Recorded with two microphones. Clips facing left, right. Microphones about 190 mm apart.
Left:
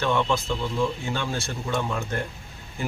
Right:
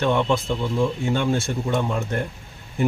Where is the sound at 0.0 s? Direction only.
20° right (ahead or behind).